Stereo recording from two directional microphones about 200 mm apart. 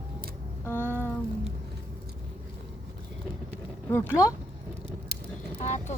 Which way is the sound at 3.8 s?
15° left (ahead or behind).